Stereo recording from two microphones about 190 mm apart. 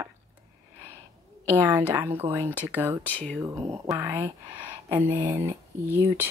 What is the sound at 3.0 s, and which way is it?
Speech, 10° left (ahead or behind).